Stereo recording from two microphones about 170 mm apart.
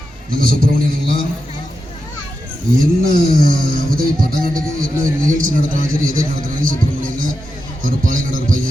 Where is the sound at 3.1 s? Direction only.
60° right (ahead or behind).